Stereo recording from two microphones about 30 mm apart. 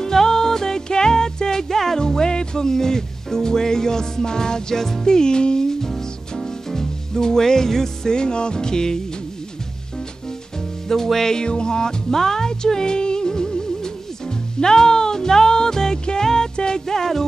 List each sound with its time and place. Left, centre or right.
0.0 s music: centre
2.0 s music: left
8.1 s music: left
11.1 s music: centre
11.3 s music: left
16.8 s music: centre